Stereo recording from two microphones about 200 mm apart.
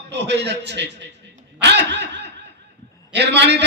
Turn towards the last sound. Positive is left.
turn(degrees=-60)  # may be behind; listen again after turning